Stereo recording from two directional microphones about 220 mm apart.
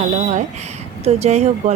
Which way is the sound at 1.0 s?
30° right (ahead or behind).